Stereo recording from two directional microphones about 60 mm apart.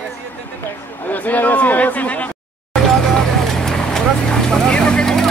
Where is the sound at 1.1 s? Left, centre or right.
Left.